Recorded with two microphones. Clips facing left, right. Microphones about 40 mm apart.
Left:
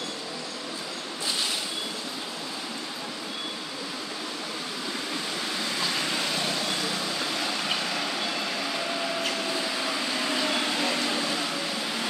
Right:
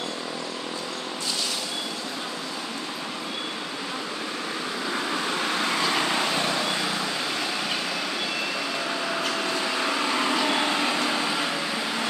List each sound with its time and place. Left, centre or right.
5.5 s vehicle: right
5.9 s vehicle: right; by 9.3 s centre
9.4 s a sound: right